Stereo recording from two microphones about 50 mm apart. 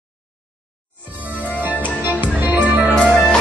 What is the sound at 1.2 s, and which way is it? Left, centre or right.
Music, right.